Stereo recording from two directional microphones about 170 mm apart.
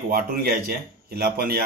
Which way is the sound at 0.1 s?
60° right (ahead or behind).